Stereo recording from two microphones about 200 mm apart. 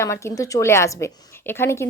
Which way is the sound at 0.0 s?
15° left (ahead or behind).